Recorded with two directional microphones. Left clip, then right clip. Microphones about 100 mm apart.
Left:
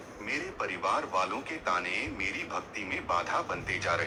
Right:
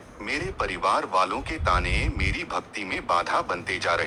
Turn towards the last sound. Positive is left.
turn(degrees=-50)  # may be behind; listen again after turning